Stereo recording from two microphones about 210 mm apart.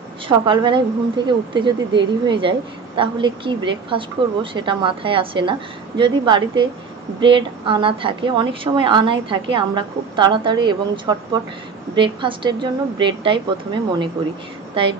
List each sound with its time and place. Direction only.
0.3 s a woman's voice: 25° right (ahead or behind)